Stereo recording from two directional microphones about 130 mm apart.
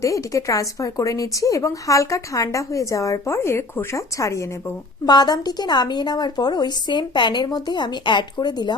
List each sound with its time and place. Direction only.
0.0 s a woman's voice: 25° left (ahead or behind)